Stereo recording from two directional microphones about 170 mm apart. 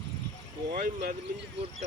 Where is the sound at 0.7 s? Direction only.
60° right (ahead or behind).